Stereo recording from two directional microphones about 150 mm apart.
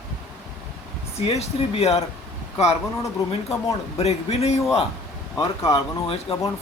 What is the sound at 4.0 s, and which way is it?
Speech, 45° left (ahead or behind).